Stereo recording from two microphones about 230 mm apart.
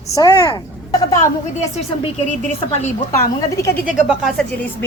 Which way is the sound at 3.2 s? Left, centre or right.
Centre.